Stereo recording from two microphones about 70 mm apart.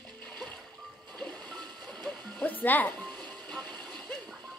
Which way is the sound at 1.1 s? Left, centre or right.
Centre.